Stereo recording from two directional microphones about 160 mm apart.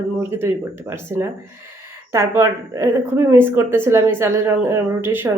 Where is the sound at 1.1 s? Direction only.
15° right (ahead or behind).